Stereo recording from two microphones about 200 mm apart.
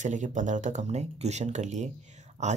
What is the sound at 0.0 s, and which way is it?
Speech, 35° right (ahead or behind).